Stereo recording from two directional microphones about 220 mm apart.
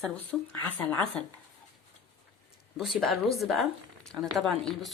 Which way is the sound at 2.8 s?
Centre (ahead or behind).